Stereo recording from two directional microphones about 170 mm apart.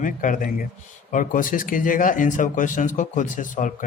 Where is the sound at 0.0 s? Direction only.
50° left (ahead or behind).